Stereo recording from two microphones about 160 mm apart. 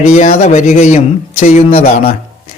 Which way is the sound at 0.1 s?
50° left (ahead or behind).